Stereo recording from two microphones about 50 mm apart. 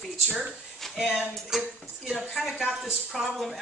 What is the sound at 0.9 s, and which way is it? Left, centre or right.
Speech, centre.